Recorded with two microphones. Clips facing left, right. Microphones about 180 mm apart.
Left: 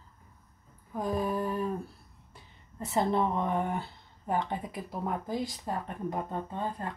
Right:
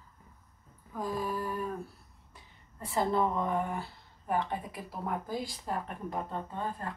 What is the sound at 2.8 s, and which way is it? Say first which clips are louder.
Speech: left 1 dB; 25° left (ahead or behind).